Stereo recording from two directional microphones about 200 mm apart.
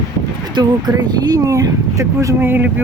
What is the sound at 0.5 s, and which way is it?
Speech, 20° right (ahead or behind).